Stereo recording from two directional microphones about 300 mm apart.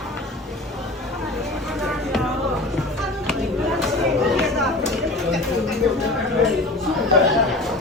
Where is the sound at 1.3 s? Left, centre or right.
Centre.